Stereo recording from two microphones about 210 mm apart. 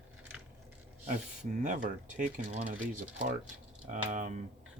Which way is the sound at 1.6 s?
35° right (ahead or behind).